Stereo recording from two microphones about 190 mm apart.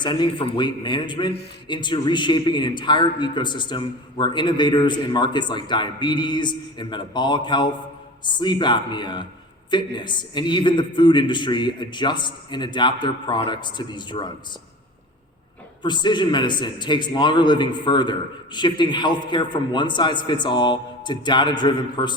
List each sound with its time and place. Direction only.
0.0 s a man's voice: 25° left (ahead or behind)
15.8 s a man's voice: 25° left (ahead or behind)